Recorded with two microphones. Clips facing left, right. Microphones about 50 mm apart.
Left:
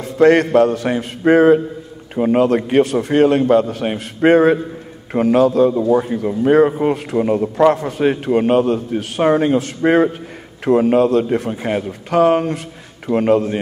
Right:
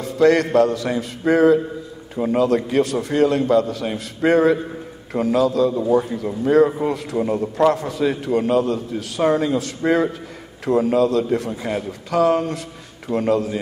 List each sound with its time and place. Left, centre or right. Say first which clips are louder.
0.0 s a man's voice: left 4 dB; left